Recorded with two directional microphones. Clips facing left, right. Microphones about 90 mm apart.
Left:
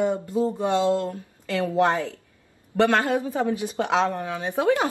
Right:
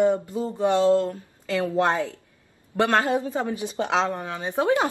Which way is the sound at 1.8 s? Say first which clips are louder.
Left 1 dB; 15° right (ahead or behind).